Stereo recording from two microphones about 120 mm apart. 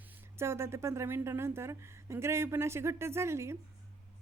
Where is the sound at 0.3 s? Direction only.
20° right (ahead or behind).